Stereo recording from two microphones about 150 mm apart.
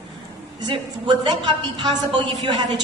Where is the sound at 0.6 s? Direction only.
30° right (ahead or behind).